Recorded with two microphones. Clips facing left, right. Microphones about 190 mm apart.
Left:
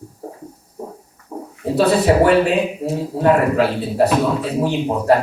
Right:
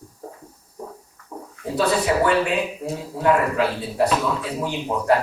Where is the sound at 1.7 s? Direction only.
30° left (ahead or behind).